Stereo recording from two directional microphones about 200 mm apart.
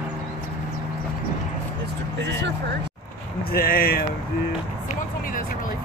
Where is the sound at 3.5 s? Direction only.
50° left (ahead or behind).